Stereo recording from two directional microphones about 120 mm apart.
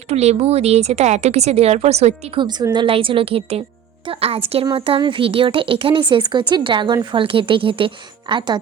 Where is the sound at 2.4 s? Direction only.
35° right (ahead or behind).